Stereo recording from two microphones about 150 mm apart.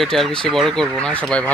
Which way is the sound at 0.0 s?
Centre (ahead or behind).